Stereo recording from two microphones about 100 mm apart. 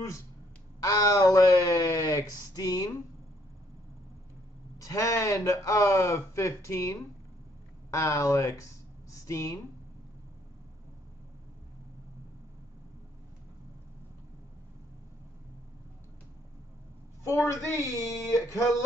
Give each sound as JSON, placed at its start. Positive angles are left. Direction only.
{"t": 0.7, "sound": "speech", "side_deg": 40}
{"t": 4.7, "sound": "speech", "side_deg": 35}
{"t": 17.5, "sound": "speech", "side_deg": 25}